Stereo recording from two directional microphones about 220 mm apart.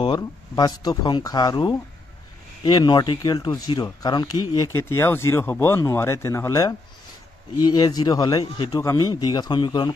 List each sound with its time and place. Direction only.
0.0 s a man's voice: 20° left (ahead or behind)